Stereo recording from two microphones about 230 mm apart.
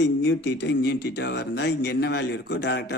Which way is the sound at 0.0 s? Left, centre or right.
Left.